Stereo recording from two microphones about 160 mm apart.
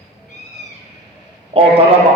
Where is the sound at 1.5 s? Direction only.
35° right (ahead or behind).